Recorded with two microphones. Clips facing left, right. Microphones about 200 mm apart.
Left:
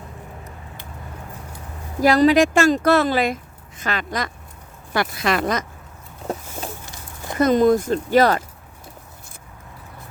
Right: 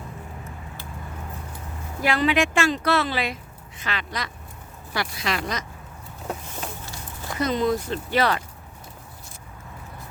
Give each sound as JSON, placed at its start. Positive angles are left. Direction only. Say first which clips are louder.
{"t": 2.0, "sound": "speech", "louder": "left 7 dB", "side_deg": 40}
{"t": 7.3, "sound": "speech", "louder": "left 8 dB", "side_deg": 50}